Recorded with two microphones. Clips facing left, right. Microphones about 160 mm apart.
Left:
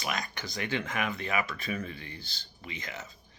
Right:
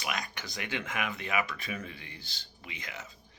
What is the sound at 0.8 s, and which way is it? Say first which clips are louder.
Speech: left 3 dB; 35° left (ahead or behind).